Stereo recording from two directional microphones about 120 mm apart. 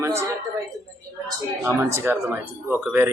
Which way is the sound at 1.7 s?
20° right (ahead or behind).